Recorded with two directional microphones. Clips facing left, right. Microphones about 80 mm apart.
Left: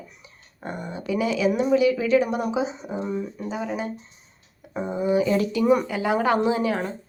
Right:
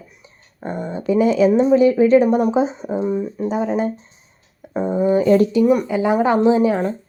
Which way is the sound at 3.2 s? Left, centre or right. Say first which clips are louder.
Right 8 dB; right.